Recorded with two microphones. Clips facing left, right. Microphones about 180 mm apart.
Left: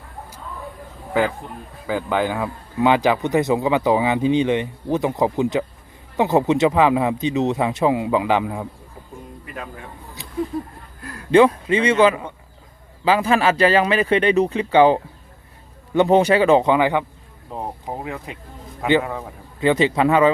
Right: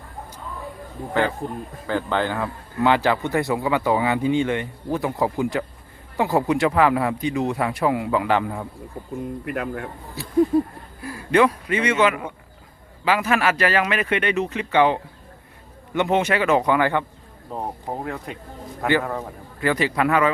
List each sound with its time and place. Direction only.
1.9 s a man's voice: 10° left (ahead or behind)
9.4 s speech: 65° right (ahead or behind)
10.2 s a man's voice: 20° left (ahead or behind)
10.5 s a sound: 25° right (ahead or behind)
11.0 s a sound: 5° right (ahead or behind)
11.3 s a man's voice: 30° left (ahead or behind)
17.9 s speech: 5° left (ahead or behind)
19.5 s a man's voice: 25° left (ahead or behind)